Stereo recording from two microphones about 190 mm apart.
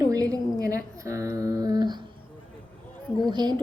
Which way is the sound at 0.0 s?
20° right (ahead or behind).